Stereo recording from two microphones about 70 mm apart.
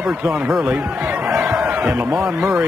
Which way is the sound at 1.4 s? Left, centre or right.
Right.